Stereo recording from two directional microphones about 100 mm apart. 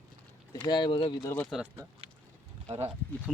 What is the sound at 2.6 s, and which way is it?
Speech, 90° right.